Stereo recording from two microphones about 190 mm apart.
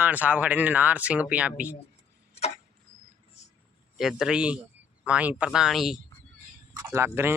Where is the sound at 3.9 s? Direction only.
5° right (ahead or behind).